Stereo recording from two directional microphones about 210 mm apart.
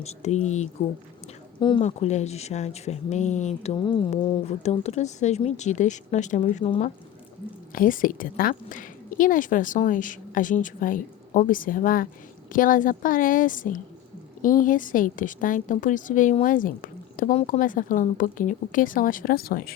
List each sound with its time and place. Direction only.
0.0 s a woman's voice: 30° left (ahead or behind)
1.5 s speech: 20° left (ahead or behind)
1.8 s a woman's voice: 35° left (ahead or behind)